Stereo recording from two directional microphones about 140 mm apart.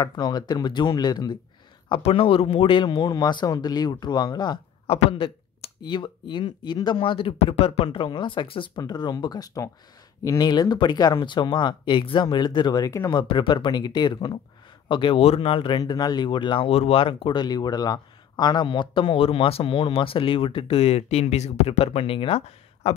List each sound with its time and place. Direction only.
0.0 s speech: 30° left (ahead or behind)
1.9 s speech: 40° left (ahead or behind)
4.9 s speech: 45° left (ahead or behind); by 13.2 s 25° left (ahead or behind)
13.2 s speech: 35° left (ahead or behind)